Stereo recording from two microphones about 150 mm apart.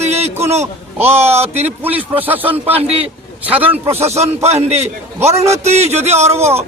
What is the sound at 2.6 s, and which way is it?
Speech, 45° right (ahead or behind).